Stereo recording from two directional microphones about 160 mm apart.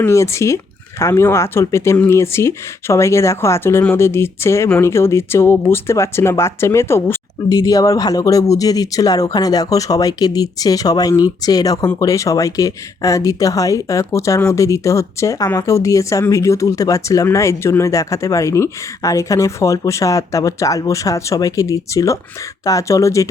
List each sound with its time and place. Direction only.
0.0 s speech: 15° left (ahead or behind)